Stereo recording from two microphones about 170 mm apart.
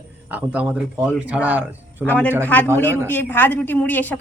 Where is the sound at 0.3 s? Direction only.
10° right (ahead or behind).